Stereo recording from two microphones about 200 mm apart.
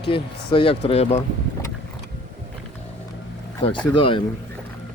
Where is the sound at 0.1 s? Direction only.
25° left (ahead or behind).